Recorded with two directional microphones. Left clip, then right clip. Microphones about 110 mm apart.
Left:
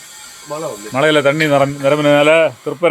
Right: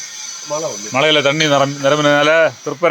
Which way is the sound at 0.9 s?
20° left (ahead or behind).